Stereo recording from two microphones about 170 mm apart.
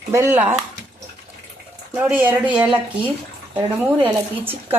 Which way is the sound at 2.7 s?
30° right (ahead or behind).